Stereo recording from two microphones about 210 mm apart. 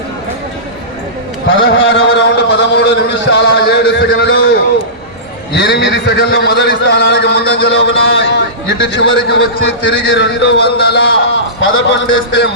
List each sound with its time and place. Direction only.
1.5 s a man's voice: 55° left (ahead or behind)
5.5 s a man's voice: 55° left (ahead or behind)
11.6 s a man's voice: 65° left (ahead or behind)